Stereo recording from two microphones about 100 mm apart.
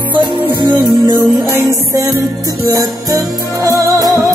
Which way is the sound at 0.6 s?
50° right (ahead or behind).